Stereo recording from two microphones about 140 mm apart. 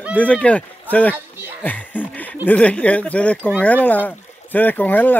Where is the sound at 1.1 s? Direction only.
15° right (ahead or behind).